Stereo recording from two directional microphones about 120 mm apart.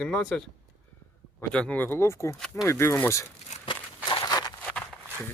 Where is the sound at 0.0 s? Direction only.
5° left (ahead or behind).